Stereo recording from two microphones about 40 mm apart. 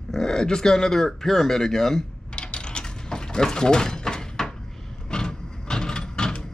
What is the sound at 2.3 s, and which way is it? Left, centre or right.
Mechanisms, left.